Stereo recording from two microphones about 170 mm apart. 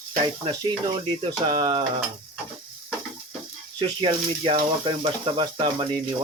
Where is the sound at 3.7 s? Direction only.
30° right (ahead or behind).